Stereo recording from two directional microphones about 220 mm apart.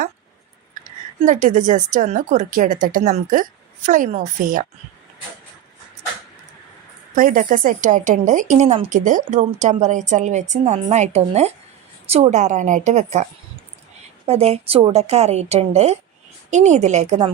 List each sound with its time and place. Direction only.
1.2 s a woman's voice: 35° right (ahead or behind)
7.2 s a woman's voice: 40° right (ahead or behind)
14.3 s a woman's voice: 30° right (ahead or behind)